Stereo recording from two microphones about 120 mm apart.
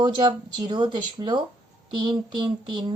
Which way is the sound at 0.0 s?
35° right (ahead or behind).